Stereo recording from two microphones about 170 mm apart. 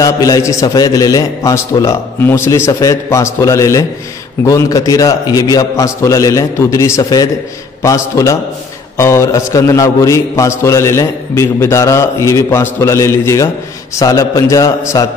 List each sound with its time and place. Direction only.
0.0 s a man's voice: 20° left (ahead or behind)